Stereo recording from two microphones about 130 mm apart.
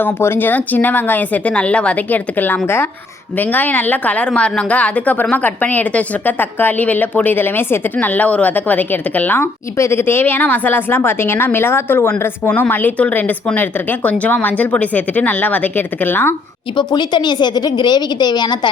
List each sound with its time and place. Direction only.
0.0 s a woman's voice: 15° left (ahead or behind)
16.7 s a woman's voice: 35° left (ahead or behind)